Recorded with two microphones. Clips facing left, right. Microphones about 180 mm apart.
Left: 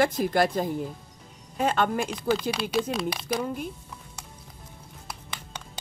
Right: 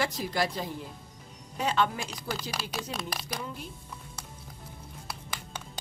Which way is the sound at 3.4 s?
50° left (ahead or behind).